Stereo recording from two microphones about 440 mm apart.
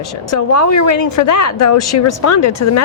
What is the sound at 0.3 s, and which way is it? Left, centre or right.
Speech, left.